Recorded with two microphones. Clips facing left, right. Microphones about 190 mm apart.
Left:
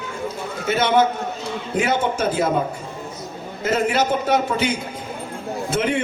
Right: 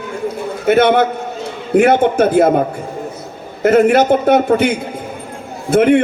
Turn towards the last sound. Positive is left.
turn(degrees=-55)  # may be behind; listen again after turning